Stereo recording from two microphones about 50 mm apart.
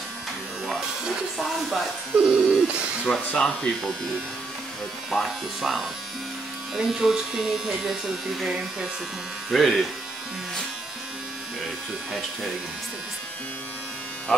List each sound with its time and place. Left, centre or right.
0.7 s music: centre
2.2 s bird: right
3.1 s speech: centre
5.1 s speech: centre
9.5 s speech: centre